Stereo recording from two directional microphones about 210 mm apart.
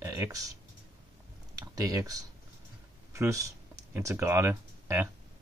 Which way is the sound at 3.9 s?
10° right (ahead or behind).